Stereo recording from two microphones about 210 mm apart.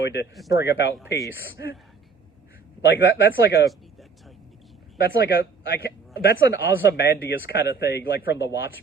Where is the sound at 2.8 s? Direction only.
55° left (ahead or behind).